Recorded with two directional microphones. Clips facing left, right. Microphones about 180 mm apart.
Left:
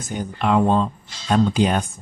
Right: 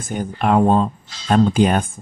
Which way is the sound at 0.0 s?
50° right (ahead or behind).